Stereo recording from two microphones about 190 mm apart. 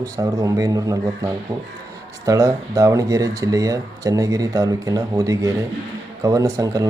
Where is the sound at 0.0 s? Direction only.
15° right (ahead or behind).